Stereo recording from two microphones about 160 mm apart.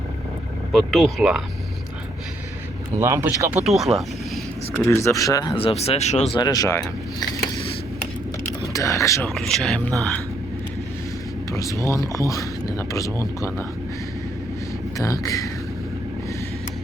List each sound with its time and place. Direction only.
0.7 s speech: centre (ahead or behind)
3.0 s speech: 15° right (ahead or behind)
3.7 s speech: centre (ahead or behind)
4.8 s speech: 15° left (ahead or behind)
5.5 s speech: 40° left (ahead or behind)
6.3 s speech: 25° left (ahead or behind)
8.6 s speech: 20° left (ahead or behind)
9.3 s speech: centre (ahead or behind)
11.5 s speech: 20° left (ahead or behind)
14.9 s speech: 20° left (ahead or behind)